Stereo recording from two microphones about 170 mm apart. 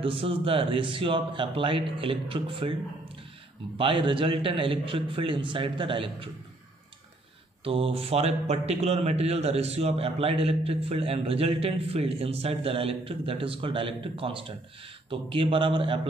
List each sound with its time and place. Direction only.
0.0 s a man's voice: 30° right (ahead or behind)
3.7 s a man's voice: 30° right (ahead or behind)
7.6 s a man's voice: 35° right (ahead or behind)